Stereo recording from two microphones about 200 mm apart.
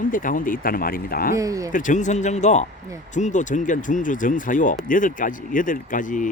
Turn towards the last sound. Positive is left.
turn(degrees=40)  # may be behind; listen again after turning